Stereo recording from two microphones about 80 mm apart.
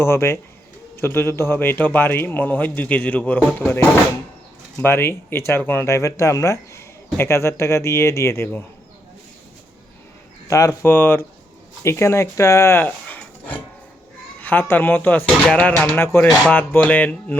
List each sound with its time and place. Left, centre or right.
0.0 s a man's voice: left
4.8 s a man's voice: left
5.9 s a man's voice: left
10.5 s speech: left
10.8 s a man's voice: left
11.8 s a man's voice: left
14.4 s a man's voice: left
16.0 s a man's voice: left